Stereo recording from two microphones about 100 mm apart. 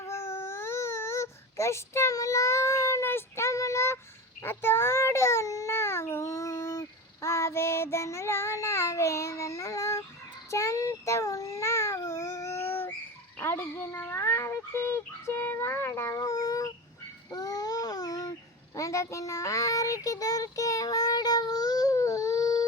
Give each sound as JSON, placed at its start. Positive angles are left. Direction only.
{"t": 0.1, "sound": "baby cry", "side_deg": 25}
{"t": 4.4, "sound": "child singing", "side_deg": 25}
{"t": 10.5, "sound": "babbling", "side_deg": 30}
{"t": 13.4, "sound": "a sound", "side_deg": 20}
{"t": 18.8, "sound": "child singing", "side_deg": 30}